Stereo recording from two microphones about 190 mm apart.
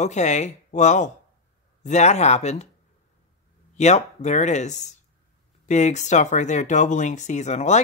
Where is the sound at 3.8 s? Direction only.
35° left (ahead or behind).